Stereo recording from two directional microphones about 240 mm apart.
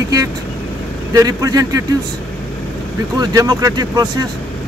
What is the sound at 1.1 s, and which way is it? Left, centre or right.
Speech, centre.